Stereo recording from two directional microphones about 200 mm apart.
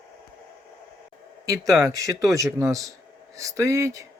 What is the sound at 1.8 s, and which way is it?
Speech, 15° right (ahead or behind).